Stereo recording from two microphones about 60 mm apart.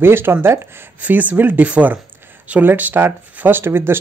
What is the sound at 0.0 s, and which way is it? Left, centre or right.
Speech, right.